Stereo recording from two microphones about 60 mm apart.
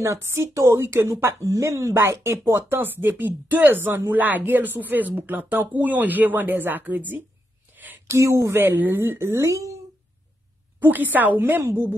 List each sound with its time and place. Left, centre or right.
0.0 s speech: right
2.0 s speech: right
7.7 s a sound: right
8.1 s speech: right
8.5 s a woman's voice: right
10.8 s speech: right